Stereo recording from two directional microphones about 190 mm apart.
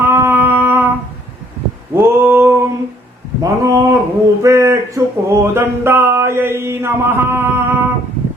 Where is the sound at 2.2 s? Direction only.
10° right (ahead or behind).